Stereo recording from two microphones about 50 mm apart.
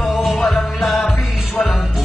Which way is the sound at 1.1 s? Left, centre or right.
Left.